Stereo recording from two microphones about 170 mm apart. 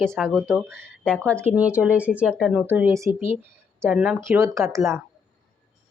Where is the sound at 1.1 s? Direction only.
5° left (ahead or behind).